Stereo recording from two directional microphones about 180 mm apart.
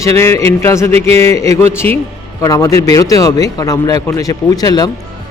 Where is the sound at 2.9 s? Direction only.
20° left (ahead or behind).